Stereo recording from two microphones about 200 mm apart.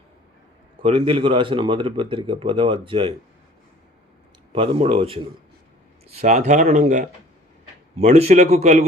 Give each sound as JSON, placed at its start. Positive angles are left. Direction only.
{"t": 0.8, "sound": "speech", "side_deg": -25}
{"t": 4.5, "sound": "speech", "side_deg": -25}